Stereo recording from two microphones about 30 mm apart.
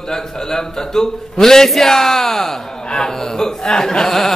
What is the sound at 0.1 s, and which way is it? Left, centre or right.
Speech, centre.